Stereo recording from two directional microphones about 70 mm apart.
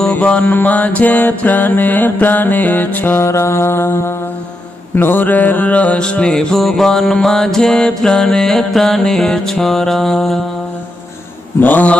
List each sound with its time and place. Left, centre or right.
0.1 s music: left
3.2 s music: left; by 10.3 s centre
11.6 s music: left